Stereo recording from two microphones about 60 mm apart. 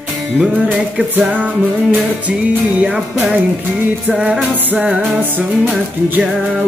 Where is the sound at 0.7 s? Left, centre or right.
Right.